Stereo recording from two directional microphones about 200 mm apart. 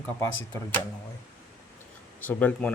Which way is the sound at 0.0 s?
10° left (ahead or behind).